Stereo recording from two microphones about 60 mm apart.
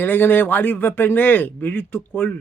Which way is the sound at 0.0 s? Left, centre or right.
Left.